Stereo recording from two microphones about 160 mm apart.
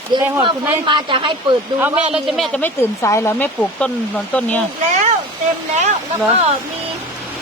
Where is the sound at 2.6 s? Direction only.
15° left (ahead or behind).